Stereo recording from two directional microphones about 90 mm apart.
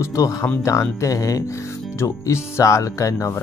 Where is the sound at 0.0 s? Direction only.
35° left (ahead or behind).